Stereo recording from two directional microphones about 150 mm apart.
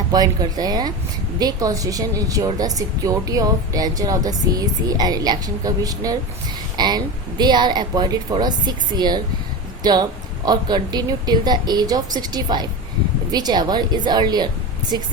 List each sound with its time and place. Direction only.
0.1 s a woman's voice: 25° right (ahead or behind)